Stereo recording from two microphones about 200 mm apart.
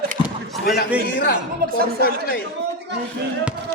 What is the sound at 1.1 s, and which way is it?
Speech, 50° left (ahead or behind).